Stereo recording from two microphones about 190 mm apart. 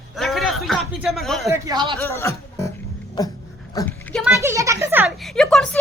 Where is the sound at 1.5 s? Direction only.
20° right (ahead or behind).